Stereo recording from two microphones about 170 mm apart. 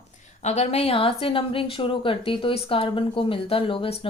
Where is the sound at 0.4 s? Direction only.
40° left (ahead or behind).